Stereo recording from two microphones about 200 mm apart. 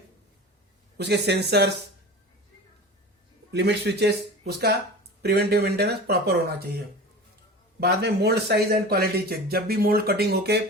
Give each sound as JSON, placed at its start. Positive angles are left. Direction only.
{"t": 0.9, "sound": "speech", "side_deg": -55}
{"t": 3.5, "sound": "speech", "side_deg": -55}
{"t": 5.2, "sound": "speech", "side_deg": -55}
{"t": 7.8, "sound": "speech", "side_deg": -55}